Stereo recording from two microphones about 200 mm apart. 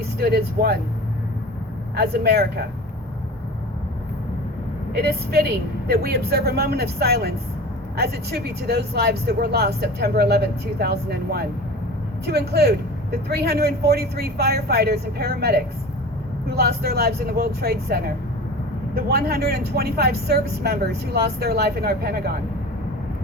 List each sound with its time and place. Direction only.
0.2 s speech: 55° right (ahead or behind)
2.0 s speech: 55° right (ahead or behind)
4.9 s speech: 55° right (ahead or behind)